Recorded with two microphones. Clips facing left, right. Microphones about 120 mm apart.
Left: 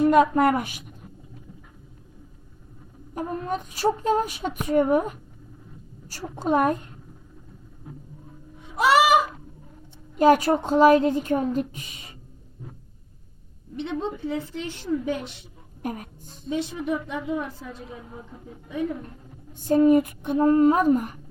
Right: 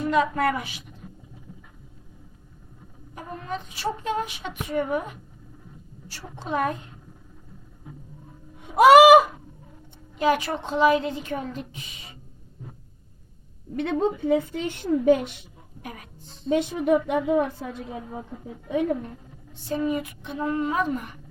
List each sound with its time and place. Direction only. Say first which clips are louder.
0.0 s a woman's voice: left 5 dB; 45° left (ahead or behind)
3.2 s a woman's voice: left 5 dB; 45° left (ahead or behind)
6.4 s a woman's voice: left 5 dB; 45° left (ahead or behind)
8.7 s a woman's voice: right 7 dB; 55° right (ahead or behind)
10.2 s a woman's voice: left 6 dB; 45° left (ahead or behind)
14.0 s a woman's voice: right 6 dB; 55° right (ahead or behind)
15.8 s a woman's voice: left 8 dB; 45° left (ahead or behind)
16.5 s a woman's voice: right 6 dB; 55° right (ahead or behind)
18.7 s a woman's voice: right 4 dB; 75° right (ahead or behind)
19.5 s a woman's voice: left 9 dB; 45° left (ahead or behind)